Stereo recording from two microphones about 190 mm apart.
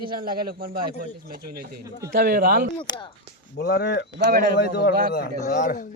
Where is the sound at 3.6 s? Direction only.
60° left (ahead or behind).